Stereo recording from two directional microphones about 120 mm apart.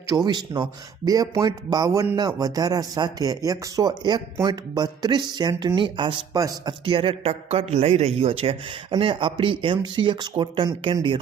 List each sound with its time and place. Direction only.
0.1 s speech: 35° right (ahead or behind)
6.3 s speech: 30° right (ahead or behind)
6.8 s speech: 50° right (ahead or behind)